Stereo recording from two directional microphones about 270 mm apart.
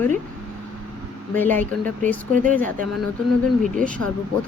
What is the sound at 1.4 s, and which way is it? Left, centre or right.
Speech, centre.